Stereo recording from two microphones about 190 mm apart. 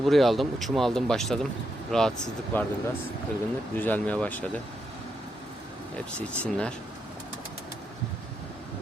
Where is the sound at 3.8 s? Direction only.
10° left (ahead or behind).